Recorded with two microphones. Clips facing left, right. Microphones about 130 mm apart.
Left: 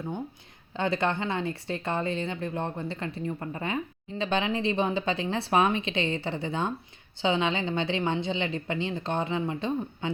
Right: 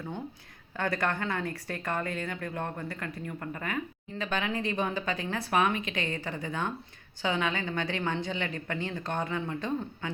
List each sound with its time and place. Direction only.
0.7 s speech: 25° left (ahead or behind)